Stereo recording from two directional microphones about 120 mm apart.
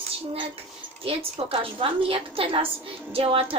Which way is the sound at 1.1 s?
55° right (ahead or behind).